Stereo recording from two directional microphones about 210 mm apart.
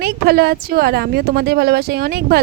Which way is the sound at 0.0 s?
50° right (ahead or behind).